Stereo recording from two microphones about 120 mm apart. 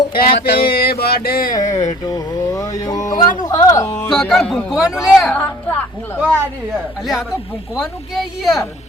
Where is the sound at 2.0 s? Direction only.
30° left (ahead or behind).